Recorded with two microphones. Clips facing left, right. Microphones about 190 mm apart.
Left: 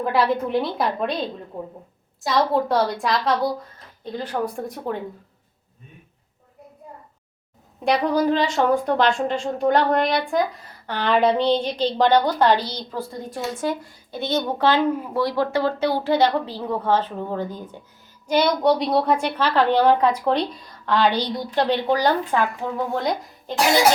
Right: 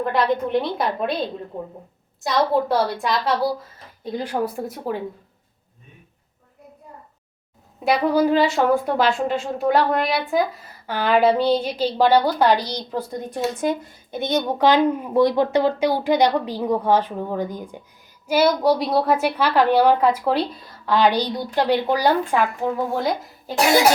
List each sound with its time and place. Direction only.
0.0 s a woman's voice: 5° left (ahead or behind)
2.2 s a woman's voice: centre (ahead or behind)
4.0 s a woman's voice: 10° right (ahead or behind)
7.9 s a woman's voice: 5° right (ahead or behind)